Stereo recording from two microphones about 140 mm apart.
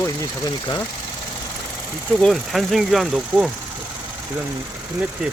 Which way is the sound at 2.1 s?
Centre (ahead or behind).